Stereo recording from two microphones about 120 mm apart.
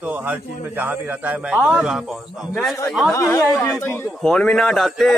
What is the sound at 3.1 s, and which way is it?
Speech, 25° left (ahead or behind).